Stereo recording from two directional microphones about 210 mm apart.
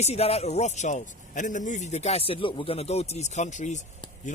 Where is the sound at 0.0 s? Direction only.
30° left (ahead or behind).